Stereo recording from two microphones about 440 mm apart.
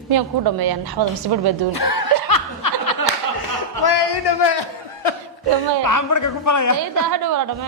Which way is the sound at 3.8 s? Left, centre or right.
Left.